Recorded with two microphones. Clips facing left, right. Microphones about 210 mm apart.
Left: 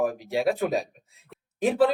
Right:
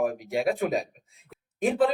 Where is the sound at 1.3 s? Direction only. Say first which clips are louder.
Left 1 dB; centre (ahead or behind).